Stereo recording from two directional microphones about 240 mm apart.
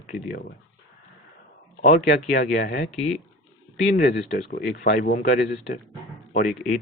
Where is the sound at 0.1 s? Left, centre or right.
Left.